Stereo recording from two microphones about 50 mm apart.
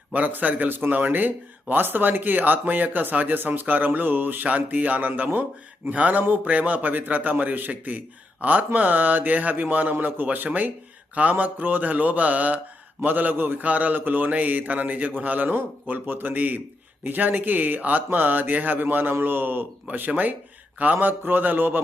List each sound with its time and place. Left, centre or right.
0.1 s speech: right
5.9 s a man's voice: right
19.9 s speech: right